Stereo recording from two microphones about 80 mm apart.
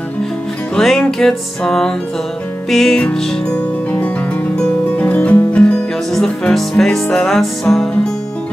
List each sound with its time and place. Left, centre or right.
0.7 s music: centre
3.0 s music: centre